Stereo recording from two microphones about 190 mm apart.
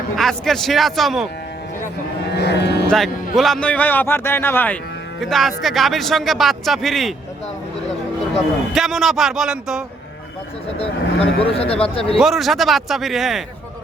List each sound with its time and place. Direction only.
0.2 s speech: centre (ahead or behind)
2.3 s cattle: 60° left (ahead or behind)
3.3 s a man's voice: centre (ahead or behind)
8.7 s speech: centre (ahead or behind)
10.8 s speech: 30° left (ahead or behind)
12.1 s speech: centre (ahead or behind)